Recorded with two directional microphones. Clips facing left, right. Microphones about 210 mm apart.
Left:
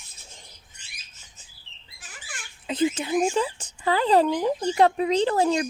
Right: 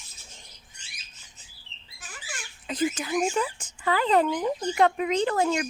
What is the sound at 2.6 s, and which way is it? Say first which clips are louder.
Speech: left 3 dB; 25° left (ahead or behind).